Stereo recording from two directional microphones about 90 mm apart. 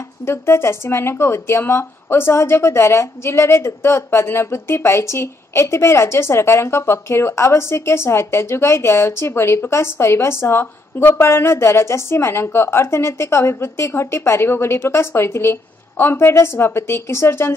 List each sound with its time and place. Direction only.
0.2 s a woman's voice: 25° left (ahead or behind)